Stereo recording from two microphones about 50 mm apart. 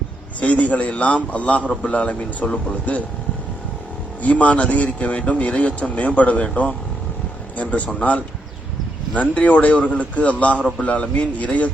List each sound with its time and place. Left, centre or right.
0.3 s speech: left
4.2 s a man's voice: left